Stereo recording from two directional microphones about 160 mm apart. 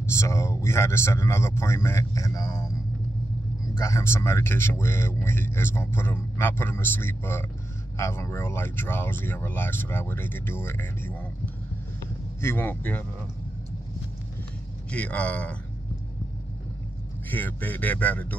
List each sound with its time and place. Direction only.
0.1 s speech: 20° left (ahead or behind)
3.8 s speech: 15° left (ahead or behind)
12.4 s speech: 15° left (ahead or behind)
14.9 s speech: 10° left (ahead or behind)
17.3 s speech: 10° left (ahead or behind)